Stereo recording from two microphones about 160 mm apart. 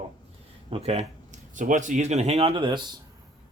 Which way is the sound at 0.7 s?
40° right (ahead or behind).